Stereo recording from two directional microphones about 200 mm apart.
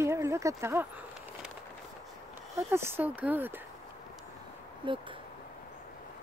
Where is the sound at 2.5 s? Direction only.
10° right (ahead or behind).